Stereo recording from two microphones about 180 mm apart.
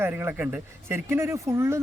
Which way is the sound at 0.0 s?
10° right (ahead or behind).